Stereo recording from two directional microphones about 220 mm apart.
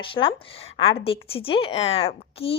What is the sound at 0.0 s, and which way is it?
A woman's voice, 25° left (ahead or behind).